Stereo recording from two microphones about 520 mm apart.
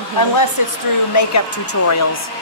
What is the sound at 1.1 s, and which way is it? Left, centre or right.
Speech, left.